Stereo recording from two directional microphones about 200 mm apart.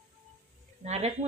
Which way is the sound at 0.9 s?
30° right (ahead or behind).